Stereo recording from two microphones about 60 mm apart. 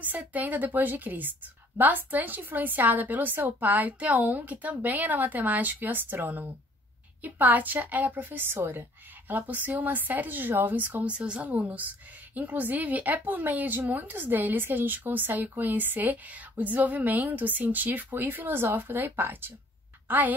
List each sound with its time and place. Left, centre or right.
0.0 s a woman's voice: right
11.1 s a woman's voice: centre